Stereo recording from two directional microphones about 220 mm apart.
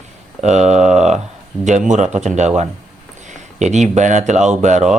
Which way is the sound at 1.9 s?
30° right (ahead or behind).